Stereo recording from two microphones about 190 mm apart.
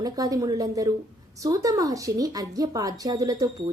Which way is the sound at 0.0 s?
20° right (ahead or behind).